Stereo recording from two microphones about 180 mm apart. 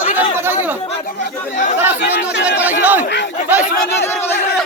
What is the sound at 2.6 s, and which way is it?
Crowd, 10° right (ahead or behind).